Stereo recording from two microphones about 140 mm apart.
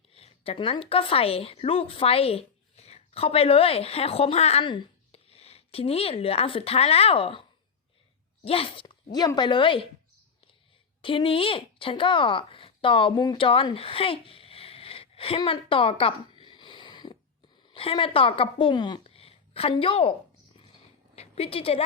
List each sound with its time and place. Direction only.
0.1 s a woman's voice: 45° left (ahead or behind)
8.4 s a woman's voice: 40° left (ahead or behind)
11.0 s a woman's voice: 40° left (ahead or behind)
19.0 s a sound: 45° left (ahead or behind)